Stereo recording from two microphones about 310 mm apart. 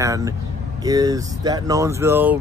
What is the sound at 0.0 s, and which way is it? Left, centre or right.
Vehicle, centre.